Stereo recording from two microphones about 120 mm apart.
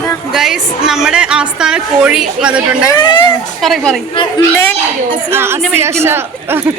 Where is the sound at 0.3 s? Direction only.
5° right (ahead or behind).